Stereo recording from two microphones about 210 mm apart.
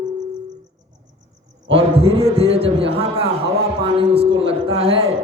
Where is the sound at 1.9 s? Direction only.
30° right (ahead or behind).